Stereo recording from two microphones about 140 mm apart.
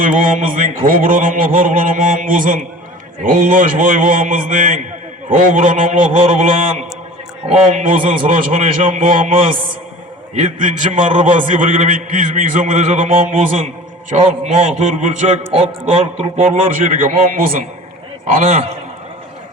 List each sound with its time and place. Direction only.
0.0 s a man's voice: 70° right (ahead or behind)
10.3 s a man's voice: 60° right (ahead or behind)
14.1 s a man's voice: 45° right (ahead or behind)
15.5 s a man's voice: 45° right (ahead or behind)
16.4 s a man's voice: 65° right (ahead or behind)